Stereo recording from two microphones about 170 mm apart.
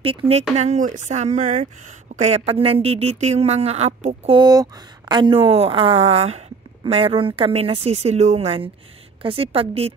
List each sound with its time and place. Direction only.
0.0 s a woman's voice: 30° right (ahead or behind)
4.3 s a woman's voice: 25° right (ahead or behind)